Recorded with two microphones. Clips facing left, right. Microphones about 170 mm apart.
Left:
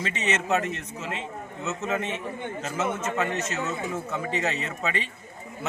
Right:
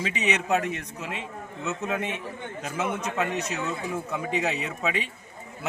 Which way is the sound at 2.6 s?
15° right (ahead or behind).